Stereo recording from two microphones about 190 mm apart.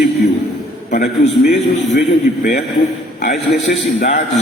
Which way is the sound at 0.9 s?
40° left (ahead or behind).